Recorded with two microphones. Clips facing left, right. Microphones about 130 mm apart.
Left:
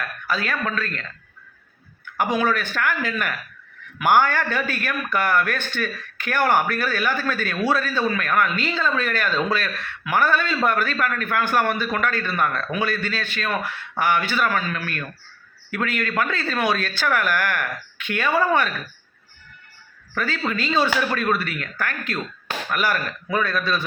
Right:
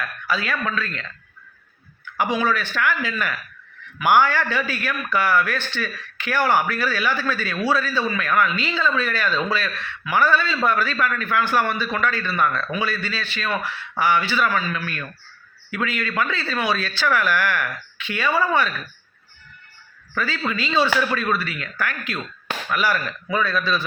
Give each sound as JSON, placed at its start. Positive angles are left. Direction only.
{"t": 0.3, "sound": "a man's voice", "side_deg": 45}
{"t": 2.1, "sound": "a man's voice", "side_deg": 50}
{"t": 20.1, "sound": "a man's voice", "side_deg": 50}